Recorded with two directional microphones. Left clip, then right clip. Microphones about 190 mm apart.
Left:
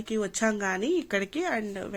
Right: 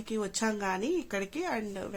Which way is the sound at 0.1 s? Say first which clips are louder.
Left 4 dB; 15° left (ahead or behind).